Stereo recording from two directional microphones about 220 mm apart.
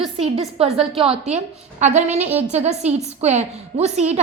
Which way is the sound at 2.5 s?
30° right (ahead or behind).